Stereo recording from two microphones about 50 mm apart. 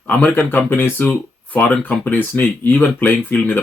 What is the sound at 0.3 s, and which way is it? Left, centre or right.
Speech, left.